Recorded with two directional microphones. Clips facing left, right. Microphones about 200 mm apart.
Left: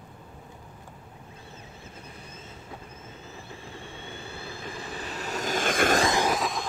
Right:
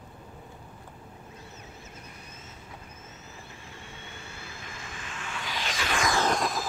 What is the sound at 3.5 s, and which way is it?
Vehicle, 30° left (ahead or behind).